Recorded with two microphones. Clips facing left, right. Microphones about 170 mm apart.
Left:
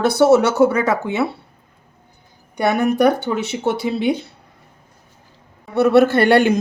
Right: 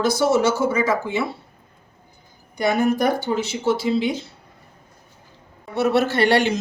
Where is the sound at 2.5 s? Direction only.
65° left (ahead or behind).